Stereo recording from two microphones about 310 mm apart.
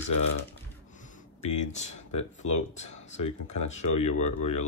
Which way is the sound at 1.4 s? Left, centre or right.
Left.